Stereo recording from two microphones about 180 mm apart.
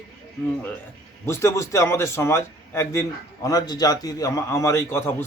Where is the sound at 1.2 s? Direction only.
15° left (ahead or behind).